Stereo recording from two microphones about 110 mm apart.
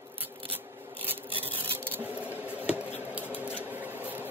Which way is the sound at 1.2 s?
55° right (ahead or behind).